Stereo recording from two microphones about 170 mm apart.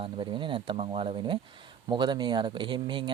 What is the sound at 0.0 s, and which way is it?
Speech, 30° right (ahead or behind).